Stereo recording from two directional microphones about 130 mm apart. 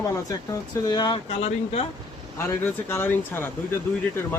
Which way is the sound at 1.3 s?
55° left (ahead or behind).